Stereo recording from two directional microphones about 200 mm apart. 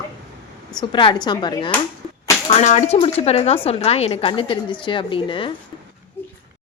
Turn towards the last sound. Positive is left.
turn(degrees=25)  # may be behind; listen again after turning